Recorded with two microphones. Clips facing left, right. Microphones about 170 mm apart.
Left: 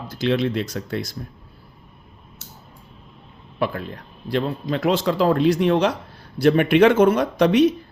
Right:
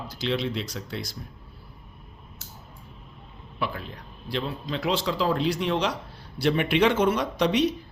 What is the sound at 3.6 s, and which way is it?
A man's voice, 55° left (ahead or behind).